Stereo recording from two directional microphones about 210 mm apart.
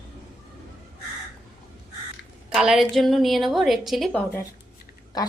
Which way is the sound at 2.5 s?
Centre (ahead or behind).